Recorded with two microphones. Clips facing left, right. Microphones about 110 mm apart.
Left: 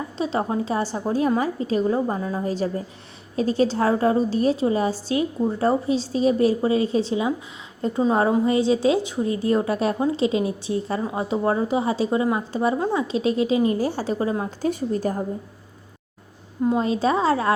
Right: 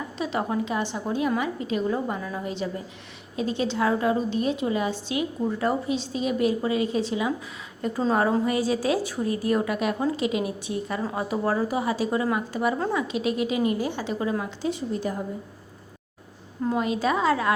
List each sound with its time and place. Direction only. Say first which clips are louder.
0.2 s a woman's voice: left 3 dB; 30° left (ahead or behind)
14.6 s a woman's voice: left 4 dB; 45° left (ahead or behind)
16.6 s a woman's voice: left 4 dB; 30° left (ahead or behind)